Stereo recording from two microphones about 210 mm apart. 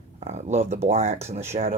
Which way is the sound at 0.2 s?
35° right (ahead or behind).